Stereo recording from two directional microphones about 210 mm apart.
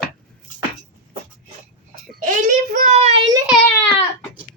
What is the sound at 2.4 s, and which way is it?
Child singing, 35° right (ahead or behind).